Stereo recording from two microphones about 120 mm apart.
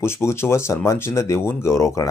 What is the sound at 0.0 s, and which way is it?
Speech, 20° left (ahead or behind).